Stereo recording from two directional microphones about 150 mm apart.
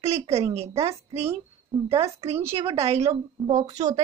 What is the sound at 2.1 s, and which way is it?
A woman's voice, 45° right (ahead or behind).